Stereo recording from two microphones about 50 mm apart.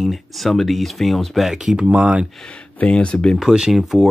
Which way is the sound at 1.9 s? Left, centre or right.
Right.